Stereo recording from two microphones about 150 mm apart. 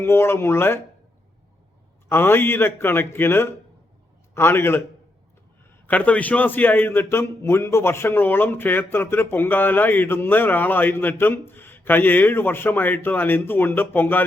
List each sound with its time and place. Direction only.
0.0 s speech: 15° left (ahead or behind)
2.0 s speech: 15° left (ahead or behind)
5.8 s speech: 10° left (ahead or behind)